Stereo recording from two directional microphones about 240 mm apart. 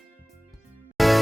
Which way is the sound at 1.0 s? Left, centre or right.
Centre.